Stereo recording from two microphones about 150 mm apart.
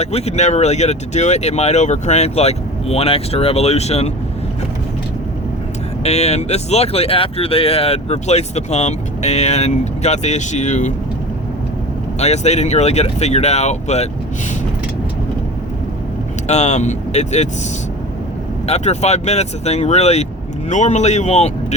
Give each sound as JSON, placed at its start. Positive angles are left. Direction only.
{"t": 0.0, "sound": "speech", "side_deg": 45}
{"t": 6.0, "sound": "speech", "side_deg": 45}
{"t": 12.2, "sound": "speech", "side_deg": 45}
{"t": 16.5, "sound": "speech", "side_deg": 50}
{"t": 18.6, "sound": "speech", "side_deg": 45}